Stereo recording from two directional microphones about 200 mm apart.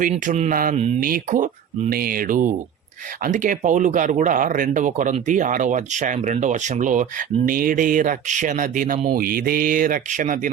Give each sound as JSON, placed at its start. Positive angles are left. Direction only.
{"t": 0.0, "sound": "speech", "side_deg": -35}